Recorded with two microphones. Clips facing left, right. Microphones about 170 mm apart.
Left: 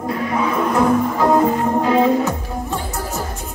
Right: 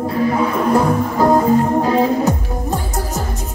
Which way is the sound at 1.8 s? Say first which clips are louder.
Even; 40° right (ahead or behind).